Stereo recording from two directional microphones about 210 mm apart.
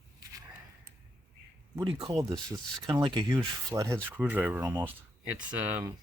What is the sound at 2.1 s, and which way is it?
Speech, 20° right (ahead or behind).